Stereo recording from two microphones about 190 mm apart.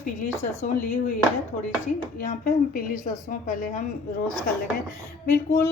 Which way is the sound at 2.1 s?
45° left (ahead or behind).